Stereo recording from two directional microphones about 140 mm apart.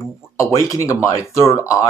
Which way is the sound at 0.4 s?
20° left (ahead or behind).